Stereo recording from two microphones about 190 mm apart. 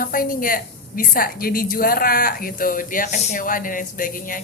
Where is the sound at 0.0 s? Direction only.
45° left (ahead or behind).